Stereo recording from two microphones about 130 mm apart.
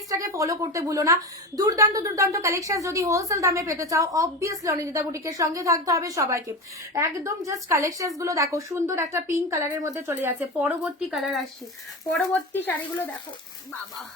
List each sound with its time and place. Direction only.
0.1 s a woman's voice: 25° right (ahead or behind)
10.8 s speech: centre (ahead or behind)
12.3 s speech: 15° left (ahead or behind)